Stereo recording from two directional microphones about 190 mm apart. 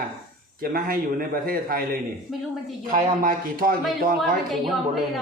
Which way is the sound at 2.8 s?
50° right (ahead or behind).